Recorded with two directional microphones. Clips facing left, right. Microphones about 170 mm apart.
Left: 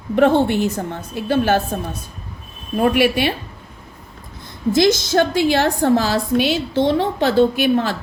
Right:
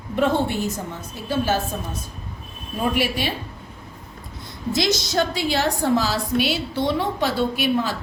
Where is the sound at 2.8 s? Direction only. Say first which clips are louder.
Left 7 dB; 65° left (ahead or behind).